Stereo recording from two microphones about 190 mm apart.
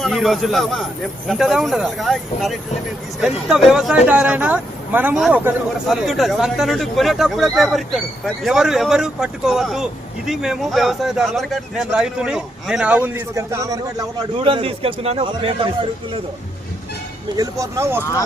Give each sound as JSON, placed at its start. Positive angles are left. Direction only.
{"t": 0.0, "sound": "speech", "side_deg": 0}
{"t": 17.3, "sound": "speech", "side_deg": -15}